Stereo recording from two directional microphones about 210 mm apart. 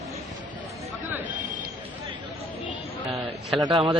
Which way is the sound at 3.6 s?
25° right (ahead or behind).